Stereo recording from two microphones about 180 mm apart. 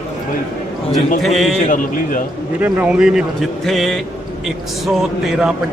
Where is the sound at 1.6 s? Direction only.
45° left (ahead or behind).